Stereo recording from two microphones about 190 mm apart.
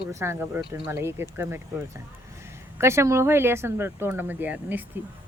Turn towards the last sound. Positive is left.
turn(degrees=-10)  # may be behind; listen again after turning